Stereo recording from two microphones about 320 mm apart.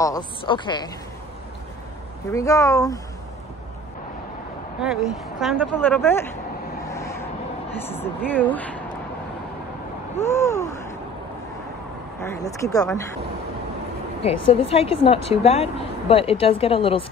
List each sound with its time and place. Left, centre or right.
0.0 s speech: centre
2.3 s speech: centre
5.4 s speech: centre
6.9 s vehicle: centre
7.8 s speech: centre
10.2 s a sound: centre
12.2 s speech: centre
14.2 s speech: centre